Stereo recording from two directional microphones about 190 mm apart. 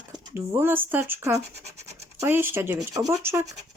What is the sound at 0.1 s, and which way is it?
Speech, 15° right (ahead or behind).